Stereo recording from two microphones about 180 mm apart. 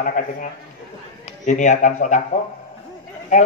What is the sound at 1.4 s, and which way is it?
Speech, 45° left (ahead or behind).